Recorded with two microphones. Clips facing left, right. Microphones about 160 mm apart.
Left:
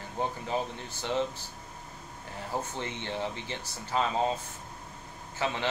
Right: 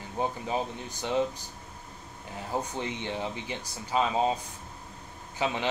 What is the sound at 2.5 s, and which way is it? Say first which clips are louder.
Speech: right 3 dB; 15° right (ahead or behind).